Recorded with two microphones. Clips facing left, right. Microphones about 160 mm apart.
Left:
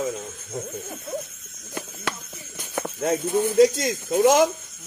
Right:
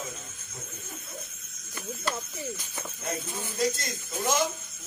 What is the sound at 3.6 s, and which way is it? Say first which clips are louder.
Speech: left 11 dB; 90° left.